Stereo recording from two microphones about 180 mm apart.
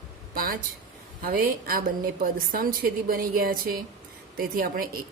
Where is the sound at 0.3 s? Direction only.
55° right (ahead or behind).